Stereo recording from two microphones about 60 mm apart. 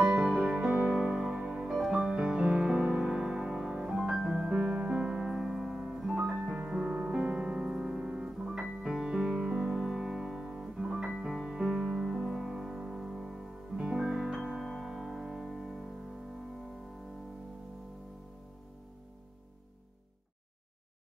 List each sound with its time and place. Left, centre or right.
0.0 s music: centre
7.0 s piano: centre
8.8 s music: centre
13.7 s music: centre